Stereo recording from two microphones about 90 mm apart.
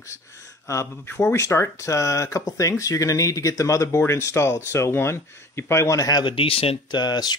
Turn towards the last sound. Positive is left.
turn(degrees=50)  # may be behind; listen again after turning